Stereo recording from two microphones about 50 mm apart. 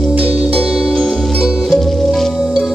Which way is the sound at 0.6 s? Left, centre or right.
Centre.